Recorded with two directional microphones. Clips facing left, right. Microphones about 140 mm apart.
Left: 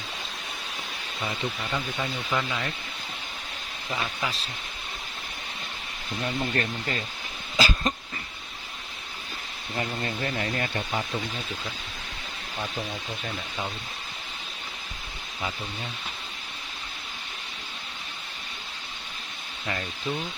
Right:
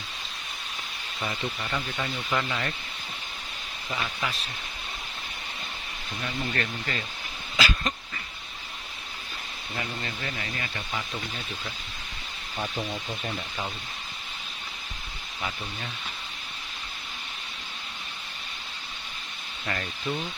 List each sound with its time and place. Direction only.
1.7 s speech: 10° left (ahead or behind)
4.0 s speech: 25° left (ahead or behind)
6.5 s speech: 30° left (ahead or behind)
7.5 s dog: 35° left (ahead or behind)
9.7 s speech: 35° left (ahead or behind)
19.6 s speech: 15° left (ahead or behind)